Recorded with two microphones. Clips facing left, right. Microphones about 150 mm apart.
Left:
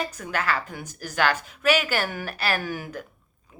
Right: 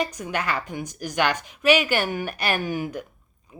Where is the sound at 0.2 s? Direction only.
15° right (ahead or behind).